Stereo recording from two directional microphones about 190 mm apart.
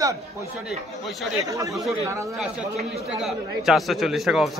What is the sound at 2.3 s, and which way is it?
A man's voice, centre (ahead or behind).